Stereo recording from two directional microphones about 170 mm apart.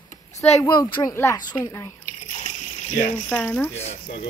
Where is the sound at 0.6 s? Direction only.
25° left (ahead or behind).